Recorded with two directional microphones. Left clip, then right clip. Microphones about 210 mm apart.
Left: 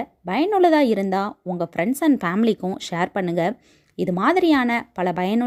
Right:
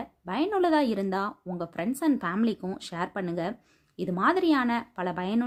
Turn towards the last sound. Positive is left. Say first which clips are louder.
# left 8 dB
turn(degrees=35)  # may be behind; listen again after turning